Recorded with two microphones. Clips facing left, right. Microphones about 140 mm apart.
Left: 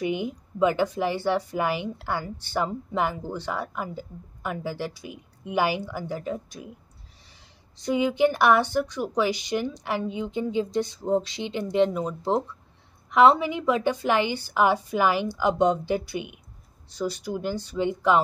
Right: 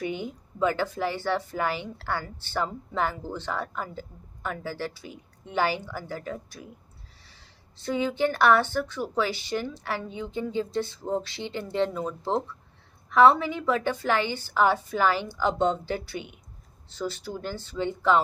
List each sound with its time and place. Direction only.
0.0 s a woman's voice: 15° left (ahead or behind)